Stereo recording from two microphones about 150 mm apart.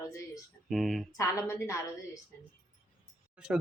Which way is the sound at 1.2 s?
20° left (ahead or behind).